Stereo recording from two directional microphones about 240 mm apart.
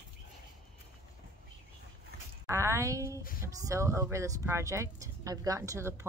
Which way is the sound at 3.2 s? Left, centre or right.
Left.